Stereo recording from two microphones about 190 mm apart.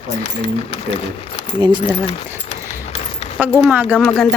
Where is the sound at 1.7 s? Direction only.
30° left (ahead or behind).